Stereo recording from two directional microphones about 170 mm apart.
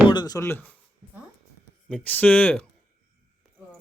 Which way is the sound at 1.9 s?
5° left (ahead or behind).